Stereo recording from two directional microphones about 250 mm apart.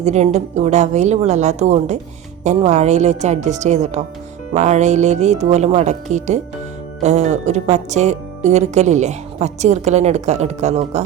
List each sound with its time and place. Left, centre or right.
0.0 s speech: right